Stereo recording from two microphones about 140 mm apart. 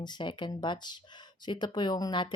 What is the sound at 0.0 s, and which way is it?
Speech, 35° left (ahead or behind).